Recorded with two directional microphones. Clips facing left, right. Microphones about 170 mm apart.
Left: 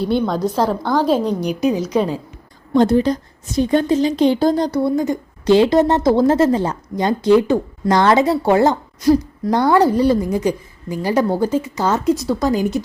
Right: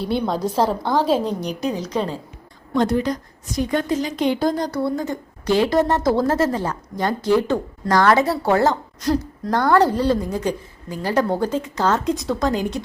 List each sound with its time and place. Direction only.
0.0 s a woman's voice: centre (ahead or behind)
2.7 s a woman's voice: 30° left (ahead or behind); by 12.8 s 5° left (ahead or behind)